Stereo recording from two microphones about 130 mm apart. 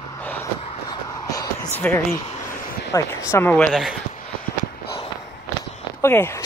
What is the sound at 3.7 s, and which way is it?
Speech, 5° right (ahead or behind).